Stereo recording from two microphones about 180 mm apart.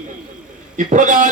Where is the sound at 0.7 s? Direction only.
45° right (ahead or behind).